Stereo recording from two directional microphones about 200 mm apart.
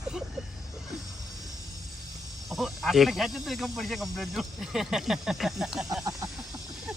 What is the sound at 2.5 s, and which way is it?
Speech, centre (ahead or behind).